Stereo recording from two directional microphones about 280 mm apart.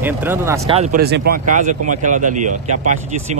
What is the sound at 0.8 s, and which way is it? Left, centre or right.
Speech, right.